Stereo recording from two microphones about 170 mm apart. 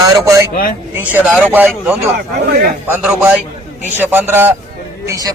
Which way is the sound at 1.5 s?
10° right (ahead or behind).